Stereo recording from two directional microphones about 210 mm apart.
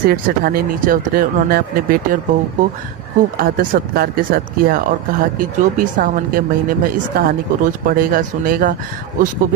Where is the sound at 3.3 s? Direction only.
45° right (ahead or behind).